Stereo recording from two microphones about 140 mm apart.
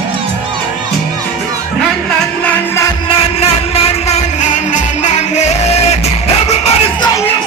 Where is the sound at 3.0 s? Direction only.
45° left (ahead or behind).